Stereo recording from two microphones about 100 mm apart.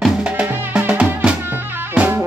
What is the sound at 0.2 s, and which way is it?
Music, 10° right (ahead or behind).